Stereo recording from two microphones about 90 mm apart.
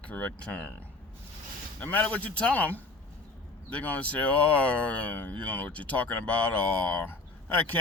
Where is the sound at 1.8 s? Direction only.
15° left (ahead or behind).